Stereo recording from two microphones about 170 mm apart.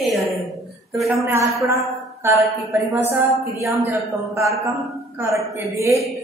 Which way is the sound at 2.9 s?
15° right (ahead or behind).